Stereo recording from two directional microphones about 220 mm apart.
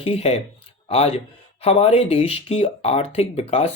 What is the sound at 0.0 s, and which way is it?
Speech, 25° left (ahead or behind).